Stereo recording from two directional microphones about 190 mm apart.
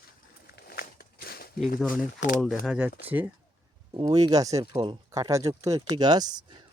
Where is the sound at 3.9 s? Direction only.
20° right (ahead or behind).